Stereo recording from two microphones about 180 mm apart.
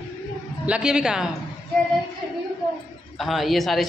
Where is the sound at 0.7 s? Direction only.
5° right (ahead or behind).